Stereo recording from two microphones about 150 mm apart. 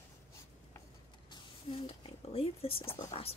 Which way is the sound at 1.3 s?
40° left (ahead or behind).